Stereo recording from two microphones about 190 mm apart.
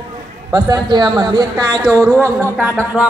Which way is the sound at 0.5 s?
15° right (ahead or behind).